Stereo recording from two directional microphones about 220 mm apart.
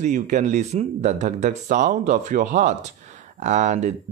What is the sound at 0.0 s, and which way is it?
Speech, 35° right (ahead or behind).